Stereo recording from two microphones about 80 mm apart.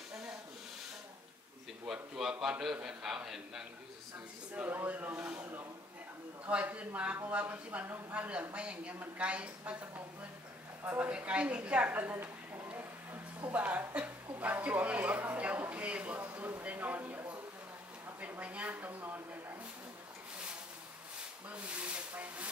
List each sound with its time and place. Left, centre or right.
1.9 s a sound: centre
2.6 s a woman's voice: centre
4.6 s a woman's voice: right
10.8 s speech: right
11.1 s a woman's voice: centre
13.5 s a sound: centre
21.5 s a woman's voice: centre